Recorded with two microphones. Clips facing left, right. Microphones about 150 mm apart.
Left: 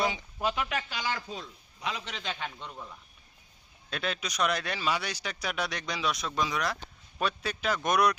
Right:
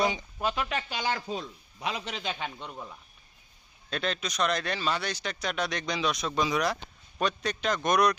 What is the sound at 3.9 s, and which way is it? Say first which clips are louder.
A man's voice: right 2 dB; 10° left (ahead or behind).